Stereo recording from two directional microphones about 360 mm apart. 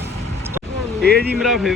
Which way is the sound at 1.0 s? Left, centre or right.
Right.